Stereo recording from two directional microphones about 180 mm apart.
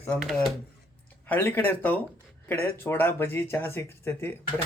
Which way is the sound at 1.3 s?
10° left (ahead or behind).